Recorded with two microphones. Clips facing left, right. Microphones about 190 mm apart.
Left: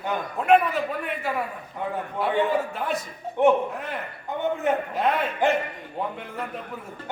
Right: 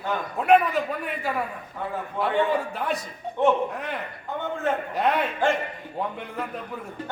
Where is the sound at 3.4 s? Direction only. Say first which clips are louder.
Left 2 dB; 15° left (ahead or behind).